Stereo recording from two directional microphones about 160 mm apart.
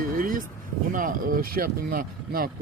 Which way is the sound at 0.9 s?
60° right (ahead or behind).